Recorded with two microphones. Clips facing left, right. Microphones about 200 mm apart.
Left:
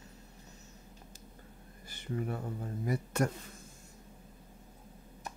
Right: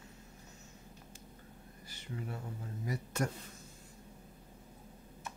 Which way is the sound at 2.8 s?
55° left (ahead or behind).